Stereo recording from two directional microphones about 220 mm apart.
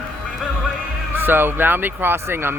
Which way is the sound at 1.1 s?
10° right (ahead or behind).